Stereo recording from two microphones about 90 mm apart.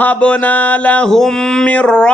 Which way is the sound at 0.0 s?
15° left (ahead or behind).